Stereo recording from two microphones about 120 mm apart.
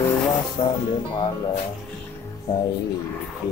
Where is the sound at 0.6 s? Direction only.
45° left (ahead or behind).